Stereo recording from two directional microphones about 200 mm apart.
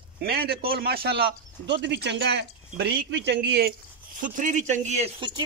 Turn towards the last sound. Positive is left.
turn(degrees=-25)  # may be behind; listen again after turning